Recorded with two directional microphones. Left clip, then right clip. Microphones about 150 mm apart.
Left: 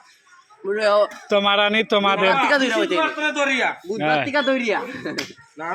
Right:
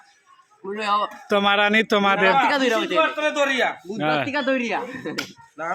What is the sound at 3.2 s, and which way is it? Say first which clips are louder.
A man's voice: even; 15° right (ahead or behind).